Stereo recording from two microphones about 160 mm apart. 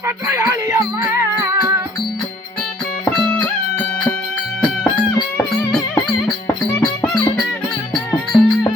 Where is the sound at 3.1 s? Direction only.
5° left (ahead or behind).